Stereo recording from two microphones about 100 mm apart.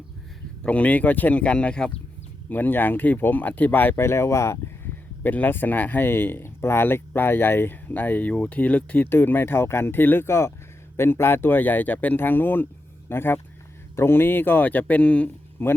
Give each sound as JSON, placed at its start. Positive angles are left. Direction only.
{"t": 0.6, "sound": "speech", "side_deg": 15}
{"t": 5.2, "sound": "speech", "side_deg": 20}